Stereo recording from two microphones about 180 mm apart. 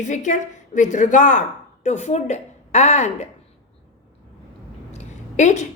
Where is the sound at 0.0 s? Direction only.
40° left (ahead or behind).